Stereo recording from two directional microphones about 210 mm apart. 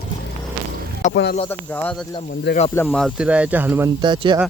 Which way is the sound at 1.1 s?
55° left (ahead or behind).